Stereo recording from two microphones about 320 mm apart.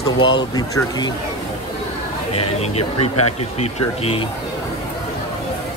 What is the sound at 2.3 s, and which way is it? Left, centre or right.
Speech, centre.